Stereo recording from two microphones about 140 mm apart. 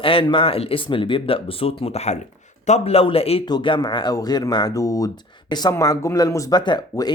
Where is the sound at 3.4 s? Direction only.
35° left (ahead or behind).